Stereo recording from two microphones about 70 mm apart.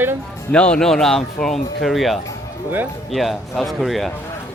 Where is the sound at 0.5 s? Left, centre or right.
Centre.